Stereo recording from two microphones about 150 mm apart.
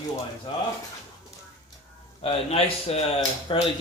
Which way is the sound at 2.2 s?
40° left (ahead or behind).